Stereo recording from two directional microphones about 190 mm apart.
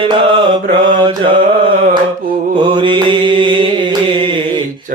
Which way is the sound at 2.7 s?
25° right (ahead or behind).